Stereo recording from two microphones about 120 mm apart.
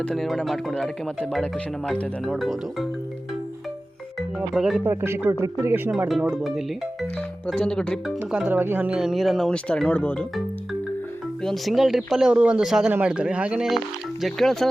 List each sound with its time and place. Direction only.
0.0 s speech: centre (ahead or behind)
4.4 s speech: 5° right (ahead or behind)
4.8 s speech: 20° right (ahead or behind)
6.1 s speech: centre (ahead or behind)
8.3 s speech: 10° right (ahead or behind); by 10.2 s 10° left (ahead or behind)
11.4 s speech: centre (ahead or behind)